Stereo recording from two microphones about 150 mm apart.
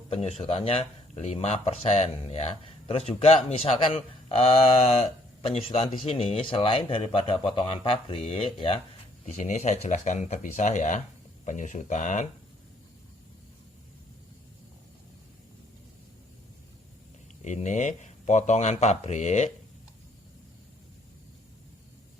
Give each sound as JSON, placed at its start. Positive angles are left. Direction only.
{"t": 0.1, "sound": "speech", "side_deg": 45}
{"t": 9.2, "sound": "speech", "side_deg": 50}
{"t": 17.4, "sound": "speech", "side_deg": 55}